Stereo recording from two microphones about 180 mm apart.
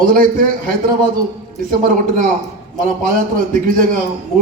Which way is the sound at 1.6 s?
50° right (ahead or behind).